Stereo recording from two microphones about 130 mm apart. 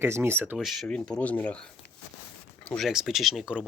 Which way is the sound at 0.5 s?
Centre (ahead or behind).